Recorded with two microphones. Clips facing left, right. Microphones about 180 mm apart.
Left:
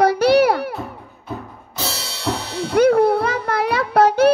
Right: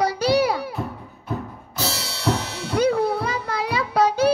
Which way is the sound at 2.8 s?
60° left (ahead or behind).